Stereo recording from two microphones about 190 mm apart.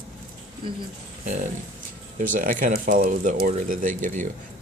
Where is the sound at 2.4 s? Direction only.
45° right (ahead or behind).